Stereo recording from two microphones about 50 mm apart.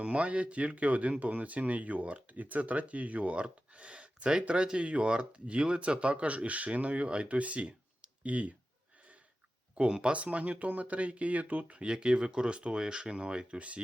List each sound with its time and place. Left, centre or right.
0.0 s speech: right
9.7 s speech: centre
11.8 s speech: centre